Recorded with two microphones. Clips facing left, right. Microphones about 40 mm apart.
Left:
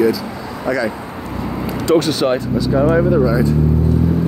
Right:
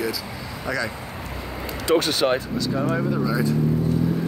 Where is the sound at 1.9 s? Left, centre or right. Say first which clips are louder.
Left 5 dB; right.